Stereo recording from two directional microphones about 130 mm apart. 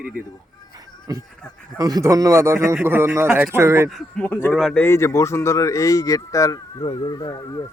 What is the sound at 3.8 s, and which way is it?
Speech, 5° left (ahead or behind).